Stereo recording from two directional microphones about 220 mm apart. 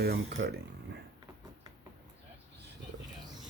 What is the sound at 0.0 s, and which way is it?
Speech, 45° right (ahead or behind).